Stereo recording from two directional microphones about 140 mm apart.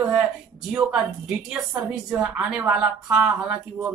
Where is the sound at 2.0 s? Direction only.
5° right (ahead or behind).